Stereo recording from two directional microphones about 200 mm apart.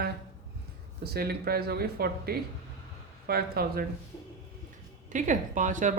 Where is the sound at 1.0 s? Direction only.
50° right (ahead or behind).